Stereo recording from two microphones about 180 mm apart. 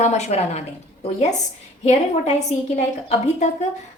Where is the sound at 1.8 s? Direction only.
35° left (ahead or behind).